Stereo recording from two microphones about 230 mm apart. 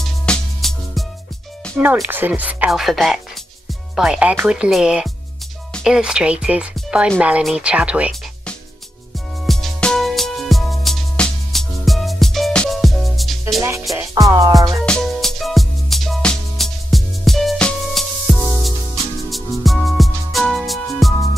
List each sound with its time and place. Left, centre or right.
0.3 s music: centre
1.8 s speech: centre
9.5 s music: centre
13.6 s music: centre
14.9 s music: centre